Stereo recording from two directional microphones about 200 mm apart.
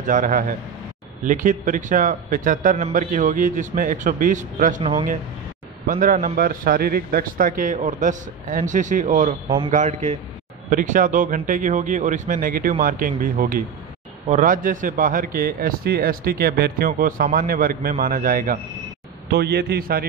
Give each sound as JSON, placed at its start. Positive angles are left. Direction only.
{"t": 0.0, "sound": "a man's voice", "side_deg": -40}